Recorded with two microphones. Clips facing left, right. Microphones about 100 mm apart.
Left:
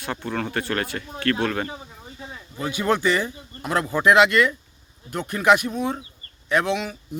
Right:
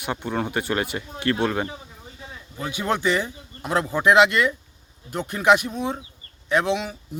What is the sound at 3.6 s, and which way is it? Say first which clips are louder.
Speech: even; 15° right (ahead or behind).